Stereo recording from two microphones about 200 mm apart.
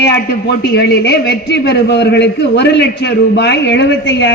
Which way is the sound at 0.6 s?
55° left (ahead or behind).